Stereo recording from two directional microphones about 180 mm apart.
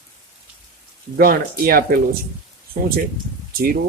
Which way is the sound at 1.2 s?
55° right (ahead or behind).